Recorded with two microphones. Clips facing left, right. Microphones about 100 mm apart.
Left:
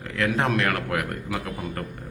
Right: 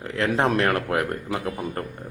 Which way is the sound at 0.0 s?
30° right (ahead or behind).